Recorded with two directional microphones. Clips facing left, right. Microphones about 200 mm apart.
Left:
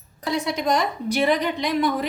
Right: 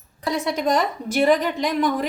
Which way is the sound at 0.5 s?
45° right (ahead or behind).